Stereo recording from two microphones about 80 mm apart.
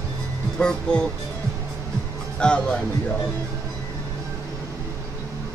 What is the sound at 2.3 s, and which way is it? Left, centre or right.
Speech, centre.